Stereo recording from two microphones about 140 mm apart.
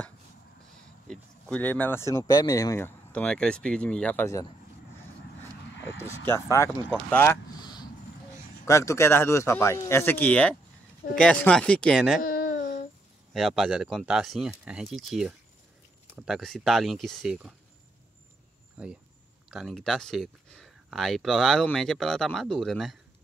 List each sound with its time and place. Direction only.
1.0 s speech: 5° left (ahead or behind); by 2.9 s 20° left (ahead or behind)
3.1 s speech: 10° left (ahead or behind)
6.3 s speech: 20° left (ahead or behind)
7.5 s a sound: 30° left (ahead or behind)
8.6 s speech: 20° left (ahead or behind); by 12.2 s centre (ahead or behind)
12.2 s babbling: 90° left
13.3 s speech: centre (ahead or behind)
19.5 s speech: centre (ahead or behind)